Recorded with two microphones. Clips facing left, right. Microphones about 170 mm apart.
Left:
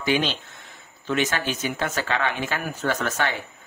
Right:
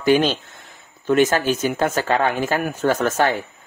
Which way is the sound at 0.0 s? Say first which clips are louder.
Right 7 dB; 45° right (ahead or behind).